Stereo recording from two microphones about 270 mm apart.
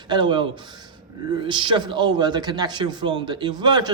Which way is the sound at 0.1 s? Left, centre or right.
Centre.